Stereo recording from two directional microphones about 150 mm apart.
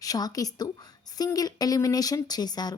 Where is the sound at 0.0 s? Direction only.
25° left (ahead or behind).